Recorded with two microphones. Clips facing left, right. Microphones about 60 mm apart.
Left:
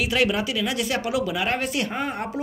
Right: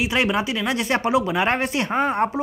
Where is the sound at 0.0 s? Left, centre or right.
Right.